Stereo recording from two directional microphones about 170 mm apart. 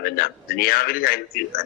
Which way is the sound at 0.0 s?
65° left (ahead or behind).